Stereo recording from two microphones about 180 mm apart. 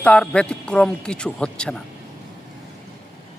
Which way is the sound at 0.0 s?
5° left (ahead or behind).